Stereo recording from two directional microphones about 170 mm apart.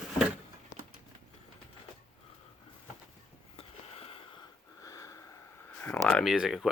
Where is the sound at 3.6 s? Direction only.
35° left (ahead or behind).